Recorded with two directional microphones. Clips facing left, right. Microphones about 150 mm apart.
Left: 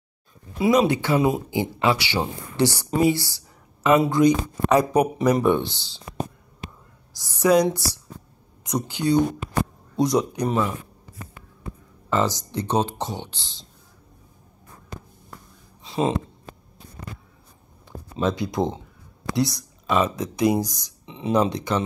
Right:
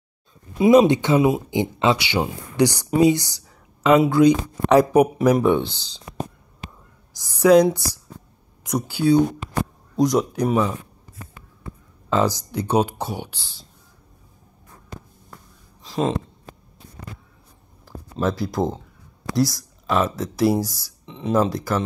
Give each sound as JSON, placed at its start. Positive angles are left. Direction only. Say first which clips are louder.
{"t": 0.6, "sound": "speech", "louder": "right 5 dB", "side_deg": -25}
{"t": 7.2, "sound": "a sound", "louder": "right 4 dB", "side_deg": -15}
{"t": 7.6, "sound": "speech", "louder": "right 3 dB", "side_deg": -10}
{"t": 12.1, "sound": "speech", "louder": "right 2 dB", "side_deg": -10}
{"t": 15.8, "sound": "a sound", "louder": "even", "side_deg": 0}
{"t": 17.8, "sound": "speech", "louder": "right 1 dB", "side_deg": 0}
{"t": 20.4, "sound": "speech", "louder": "right 1 dB", "side_deg": 15}
{"t": 20.7, "sound": "speech", "louder": "right 1 dB", "side_deg": 0}